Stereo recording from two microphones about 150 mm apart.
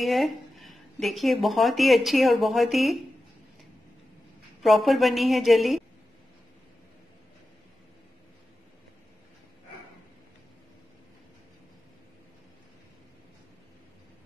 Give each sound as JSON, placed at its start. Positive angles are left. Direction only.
{"t": 0.0, "sound": "speech", "side_deg": 0}
{"t": 4.6, "sound": "speech", "side_deg": 0}